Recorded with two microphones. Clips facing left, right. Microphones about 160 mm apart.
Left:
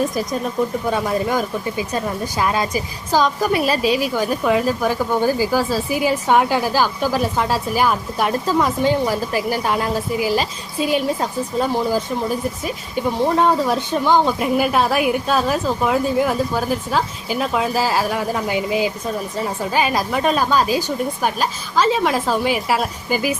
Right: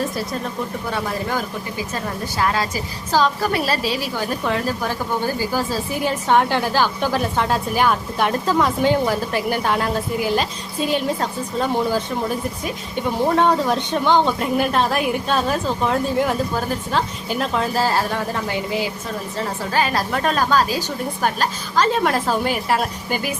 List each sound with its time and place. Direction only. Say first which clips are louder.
2.4 s speech: left 1 dB; 15° left (ahead or behind)